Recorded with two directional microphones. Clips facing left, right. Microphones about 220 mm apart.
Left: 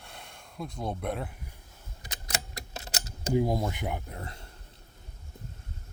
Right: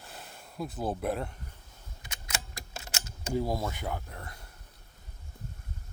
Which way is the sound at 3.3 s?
15° left (ahead or behind).